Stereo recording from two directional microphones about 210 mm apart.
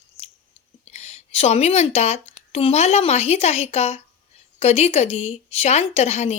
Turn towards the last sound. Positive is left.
turn(degrees=30)  # may be behind; listen again after turning